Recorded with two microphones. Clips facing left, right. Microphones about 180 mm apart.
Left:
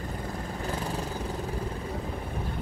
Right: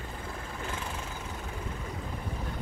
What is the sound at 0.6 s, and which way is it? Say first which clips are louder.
Vehicle: left 6 dB; 35° left (ahead or behind).